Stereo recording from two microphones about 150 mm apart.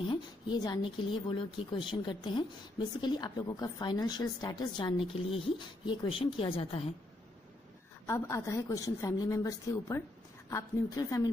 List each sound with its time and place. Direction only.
0.0 s a woman's voice: 35° left (ahead or behind)
8.1 s speech: 20° left (ahead or behind)